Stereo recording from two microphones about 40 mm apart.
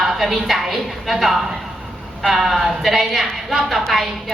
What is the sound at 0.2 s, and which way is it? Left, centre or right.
A woman's voice, centre.